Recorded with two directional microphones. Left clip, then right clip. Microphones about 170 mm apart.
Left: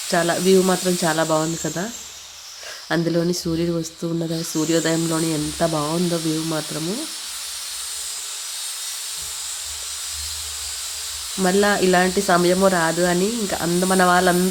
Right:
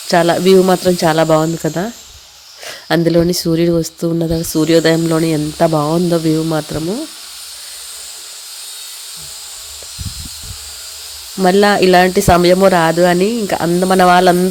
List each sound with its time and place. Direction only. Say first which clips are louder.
0.1 s speech: right 8 dB; 55° right (ahead or behind)
2.9 s speech: right 8 dB; 50° right (ahead or behind)
11.4 s speech: right 8 dB; 50° right (ahead or behind)